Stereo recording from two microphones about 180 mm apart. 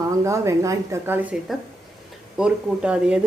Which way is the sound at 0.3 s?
15° right (ahead or behind).